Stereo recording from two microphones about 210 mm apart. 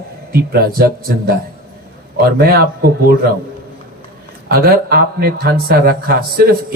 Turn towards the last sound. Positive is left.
turn(degrees=-45)  # may be behind; listen again after turning